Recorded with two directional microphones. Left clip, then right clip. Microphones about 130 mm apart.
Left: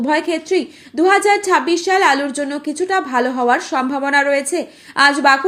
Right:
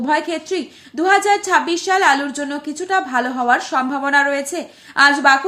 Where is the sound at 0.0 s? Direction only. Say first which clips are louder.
Left 1 dB; 25° left (ahead or behind).